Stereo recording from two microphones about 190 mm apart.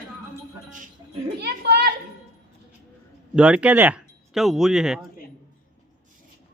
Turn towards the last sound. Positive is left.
turn(degrees=-5)  # may be behind; listen again after turning